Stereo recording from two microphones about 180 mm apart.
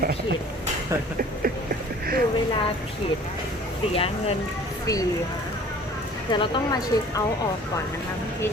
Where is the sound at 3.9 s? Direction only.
35° left (ahead or behind).